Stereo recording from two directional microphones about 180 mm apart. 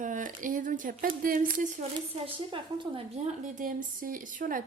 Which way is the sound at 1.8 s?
30° right (ahead or behind).